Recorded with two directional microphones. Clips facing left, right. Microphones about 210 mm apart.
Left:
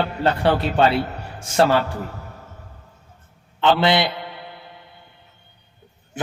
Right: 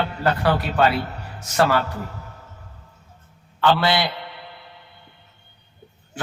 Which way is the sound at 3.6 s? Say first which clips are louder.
Left 2 dB; 20° left (ahead or behind).